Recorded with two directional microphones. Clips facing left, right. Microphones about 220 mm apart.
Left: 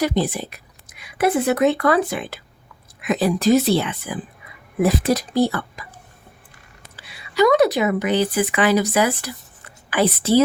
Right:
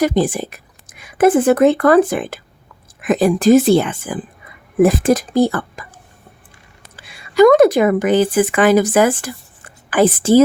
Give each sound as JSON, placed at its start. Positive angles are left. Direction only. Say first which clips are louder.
{"t": 0.0, "sound": "a woman's voice", "louder": "right 5 dB", "side_deg": -50}
{"t": 6.9, "sound": "speech", "louder": "right 8 dB", "side_deg": -50}